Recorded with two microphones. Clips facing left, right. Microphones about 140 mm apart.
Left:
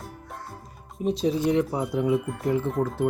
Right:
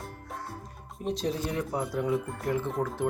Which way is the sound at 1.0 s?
Centre (ahead or behind).